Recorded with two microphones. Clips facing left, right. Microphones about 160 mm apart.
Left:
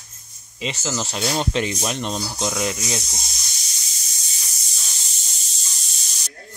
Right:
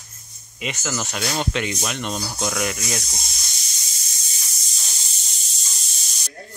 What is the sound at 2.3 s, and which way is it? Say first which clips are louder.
Speech: even; 20° left (ahead or behind).